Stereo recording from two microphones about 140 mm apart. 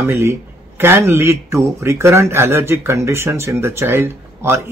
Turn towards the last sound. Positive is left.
turn(degrees=-15)  # may be behind; listen again after turning